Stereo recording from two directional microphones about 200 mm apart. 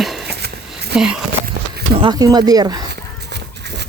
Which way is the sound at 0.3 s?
55° right (ahead or behind).